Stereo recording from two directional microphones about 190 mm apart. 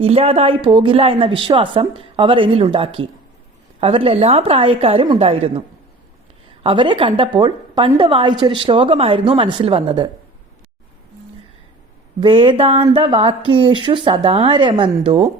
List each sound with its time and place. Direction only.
0.0 s a woman's voice: 30° right (ahead or behind)
12.2 s a woman's voice: 25° right (ahead or behind)